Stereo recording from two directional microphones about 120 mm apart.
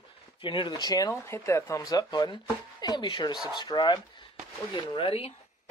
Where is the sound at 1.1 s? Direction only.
20° left (ahead or behind); by 5.4 s 55° left (ahead or behind).